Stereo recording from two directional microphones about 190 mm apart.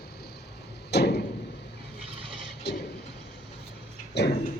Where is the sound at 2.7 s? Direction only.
60° left (ahead or behind).